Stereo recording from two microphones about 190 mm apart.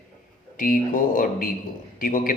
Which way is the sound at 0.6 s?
45° left (ahead or behind).